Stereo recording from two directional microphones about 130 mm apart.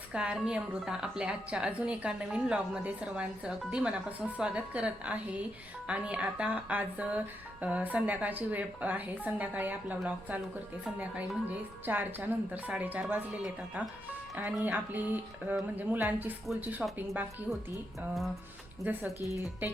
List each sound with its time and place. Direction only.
0.1 s a woman's voice: 10° right (ahead or behind)
18.8 s a woman's voice: 15° right (ahead or behind)
19.2 s speech: 25° right (ahead or behind)